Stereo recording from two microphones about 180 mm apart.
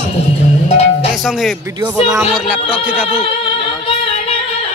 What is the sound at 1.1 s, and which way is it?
Speech, centre (ahead or behind).